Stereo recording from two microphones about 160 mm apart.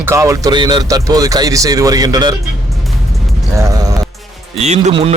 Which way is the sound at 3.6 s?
20° right (ahead or behind).